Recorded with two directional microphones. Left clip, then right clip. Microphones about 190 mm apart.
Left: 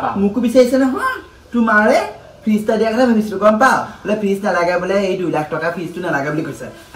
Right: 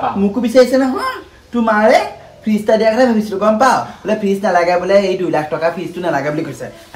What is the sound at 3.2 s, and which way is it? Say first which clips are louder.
Speech: even; 30° right (ahead or behind).